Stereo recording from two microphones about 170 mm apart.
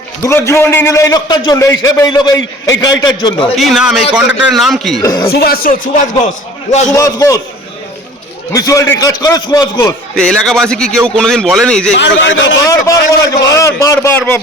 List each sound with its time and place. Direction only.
0.3 s a man's voice: 15° left (ahead or behind)
3.5 s a man's voice: centre (ahead or behind)
5.0 s a man's voice: 20° left (ahead or behind)
5.3 s speech: 60° left (ahead or behind)
6.7 s a man's voice: 45° left (ahead or behind)
6.9 s a man's voice: 20° left (ahead or behind)
8.5 s a man's voice: 20° left (ahead or behind)
10.2 s a man's voice: 5° left (ahead or behind)
11.9 s a man's voice: 90° left
12.6 s a man's voice: 20° left (ahead or behind)